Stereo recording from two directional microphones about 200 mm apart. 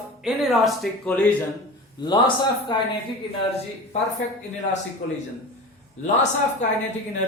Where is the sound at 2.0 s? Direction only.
20° left (ahead or behind).